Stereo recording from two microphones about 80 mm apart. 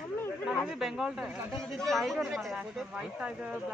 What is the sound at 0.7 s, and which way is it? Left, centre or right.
Speech, centre.